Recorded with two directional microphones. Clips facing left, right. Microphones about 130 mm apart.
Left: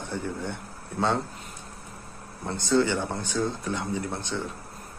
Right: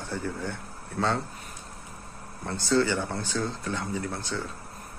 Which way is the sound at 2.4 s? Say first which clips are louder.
Left 1 dB; 20° left (ahead or behind).